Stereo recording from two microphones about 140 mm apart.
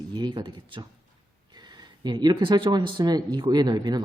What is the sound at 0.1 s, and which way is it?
Speech, 30° right (ahead or behind).